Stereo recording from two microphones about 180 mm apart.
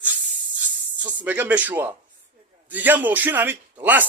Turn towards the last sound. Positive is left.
turn(degrees=-10)  # may be behind; listen again after turning